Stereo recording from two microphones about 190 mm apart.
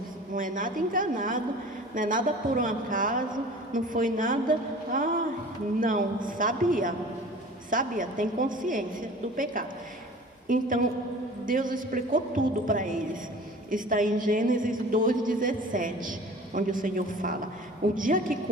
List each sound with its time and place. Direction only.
0.3 s a woman's voice: 45° right (ahead or behind)